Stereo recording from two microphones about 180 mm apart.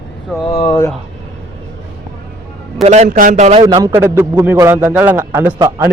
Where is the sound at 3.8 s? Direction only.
20° right (ahead or behind).